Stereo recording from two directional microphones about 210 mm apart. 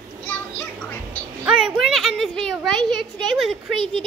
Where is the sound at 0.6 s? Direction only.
10° left (ahead or behind).